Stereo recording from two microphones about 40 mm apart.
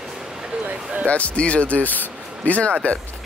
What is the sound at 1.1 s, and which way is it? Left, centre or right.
Speech, left.